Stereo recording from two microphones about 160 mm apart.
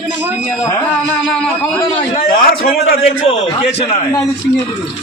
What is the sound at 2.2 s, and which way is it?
Speech, 65° left (ahead or behind).